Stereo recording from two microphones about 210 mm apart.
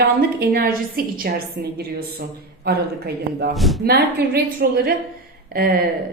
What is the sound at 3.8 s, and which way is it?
A woman's voice, 50° right (ahead or behind).